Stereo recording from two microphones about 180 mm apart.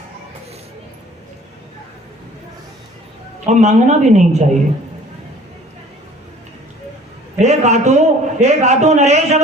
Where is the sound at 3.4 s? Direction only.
40° right (ahead or behind).